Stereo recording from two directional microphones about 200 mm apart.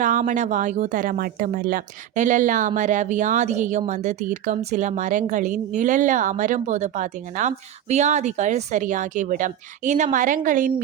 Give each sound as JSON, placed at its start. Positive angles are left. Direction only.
{"t": 0.0, "sound": "speech", "side_deg": -40}